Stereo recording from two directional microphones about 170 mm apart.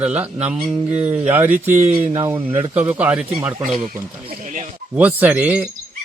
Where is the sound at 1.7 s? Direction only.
35° right (ahead or behind).